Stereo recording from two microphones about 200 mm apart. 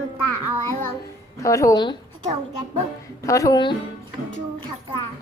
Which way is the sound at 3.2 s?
15° left (ahead or behind).